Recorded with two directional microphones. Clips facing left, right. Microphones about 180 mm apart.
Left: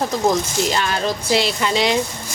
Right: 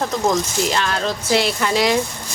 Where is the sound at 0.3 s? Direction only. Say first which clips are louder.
Left 1 dB; 5° left (ahead or behind).